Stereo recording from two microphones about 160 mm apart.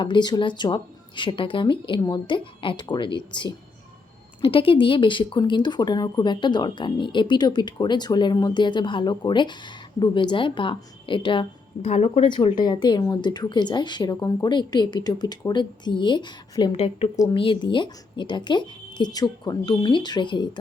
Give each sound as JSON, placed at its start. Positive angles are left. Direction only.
{"t": 0.0, "sound": "speech", "side_deg": 30}
{"t": 11.8, "sound": "speech", "side_deg": 45}